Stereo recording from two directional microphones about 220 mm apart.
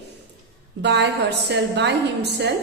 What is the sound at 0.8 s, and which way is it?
Speech, 50° right (ahead or behind).